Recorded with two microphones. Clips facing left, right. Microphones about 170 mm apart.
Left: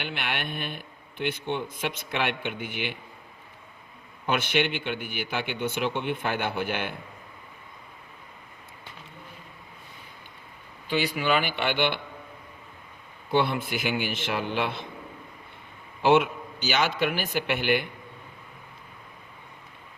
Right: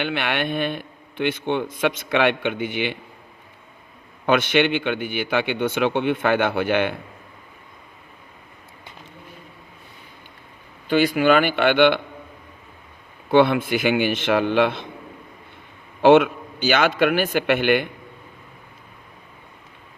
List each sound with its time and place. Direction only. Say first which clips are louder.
0.0 s a man's voice: right 9 dB; 80° right
4.3 s a man's voice: right 7 dB; 90° right
10.8 s speech: right 9 dB; 50° right (ahead or behind); by 11.9 s 80° right
13.3 s a man's voice: right 9 dB; 80° right
16.0 s a man's voice: right 7 dB; 80° right
16.6 s a man's voice: right 7 dB; 55° right (ahead or behind); by 17.8 s 75° right (ahead or behind)